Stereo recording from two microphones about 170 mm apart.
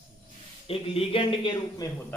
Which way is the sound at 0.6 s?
35° left (ahead or behind).